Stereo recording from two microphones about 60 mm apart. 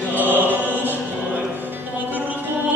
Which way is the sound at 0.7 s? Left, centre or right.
Right.